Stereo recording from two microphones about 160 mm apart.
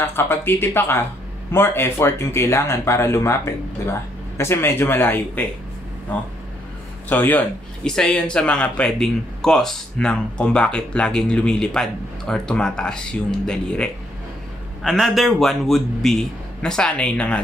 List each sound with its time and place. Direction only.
0.0 s speech: 15° left (ahead or behind)
7.1 s a man's voice: 10° left (ahead or behind)